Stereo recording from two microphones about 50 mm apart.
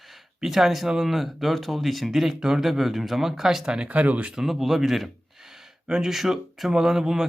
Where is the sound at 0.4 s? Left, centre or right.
Centre.